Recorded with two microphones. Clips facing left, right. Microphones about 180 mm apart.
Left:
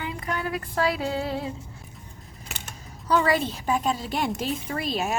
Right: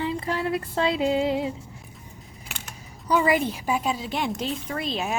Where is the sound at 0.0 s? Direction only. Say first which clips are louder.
Right 4 dB; 30° right (ahead or behind).